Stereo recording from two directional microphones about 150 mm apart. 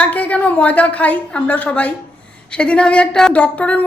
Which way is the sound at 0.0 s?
10° left (ahead or behind).